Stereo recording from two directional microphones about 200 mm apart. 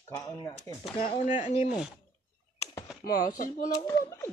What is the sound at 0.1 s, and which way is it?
Speech, 15° left (ahead or behind).